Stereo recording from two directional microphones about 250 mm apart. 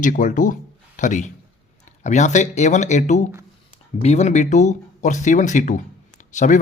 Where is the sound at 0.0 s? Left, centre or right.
Left.